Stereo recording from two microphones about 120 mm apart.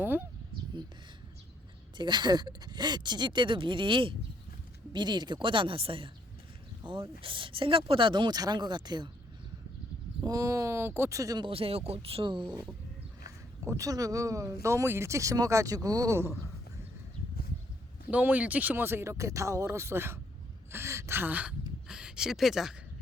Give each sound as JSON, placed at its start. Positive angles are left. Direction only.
{"t": 0.0, "sound": "speech", "side_deg": -15}
{"t": 2.0, "sound": "speech", "side_deg": -40}
{"t": 10.2, "sound": "speech", "side_deg": -30}
{"t": 11.4, "sound": "speech", "side_deg": -55}
{"t": 13.7, "sound": "speech", "side_deg": -30}
{"t": 16.1, "sound": "speech", "side_deg": -20}
{"t": 18.1, "sound": "speech", "side_deg": -15}